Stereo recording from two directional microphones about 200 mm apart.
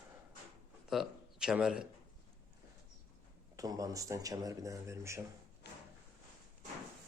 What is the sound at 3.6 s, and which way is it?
Speech, 15° right (ahead or behind).